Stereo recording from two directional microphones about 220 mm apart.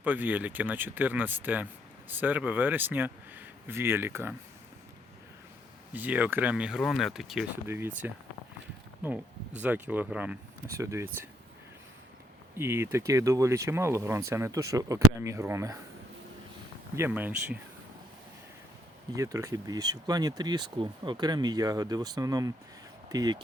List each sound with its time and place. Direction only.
0.0 s speech: 10° right (ahead or behind)
5.9 s speech: 5° right (ahead or behind)
12.5 s speech: 10° right (ahead or behind)
16.9 s speech: 10° right (ahead or behind)
19.1 s speech: 15° right (ahead or behind)